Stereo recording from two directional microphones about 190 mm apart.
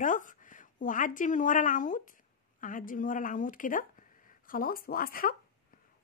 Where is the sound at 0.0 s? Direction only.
45° left (ahead or behind).